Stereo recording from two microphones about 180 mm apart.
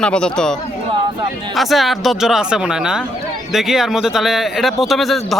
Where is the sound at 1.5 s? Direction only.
Centre (ahead or behind).